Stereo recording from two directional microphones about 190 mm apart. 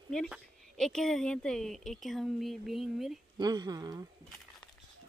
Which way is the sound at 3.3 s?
20° right (ahead or behind).